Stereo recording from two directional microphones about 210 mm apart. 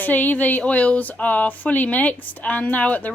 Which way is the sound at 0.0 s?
10° left (ahead or behind).